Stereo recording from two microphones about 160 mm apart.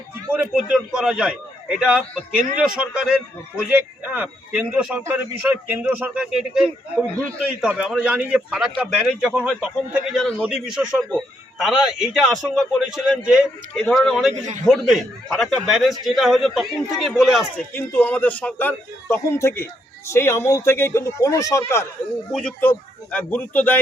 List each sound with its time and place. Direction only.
0.5 s a man's voice: 5° right (ahead or behind)
17.7 s a man's voice: 10° left (ahead or behind)
22.3 s a man's voice: 5° left (ahead or behind)